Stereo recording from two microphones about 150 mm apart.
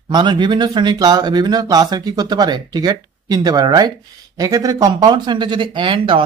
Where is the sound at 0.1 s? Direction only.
30° right (ahead or behind).